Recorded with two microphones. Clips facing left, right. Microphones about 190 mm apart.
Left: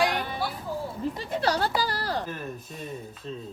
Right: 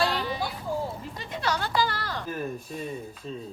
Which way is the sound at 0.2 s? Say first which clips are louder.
Right 1 dB; 55° left (ahead or behind).